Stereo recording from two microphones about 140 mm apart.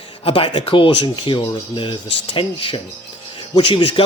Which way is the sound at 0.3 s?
40° left (ahead or behind).